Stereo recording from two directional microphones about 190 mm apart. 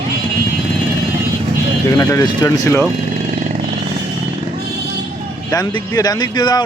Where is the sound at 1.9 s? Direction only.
20° left (ahead or behind).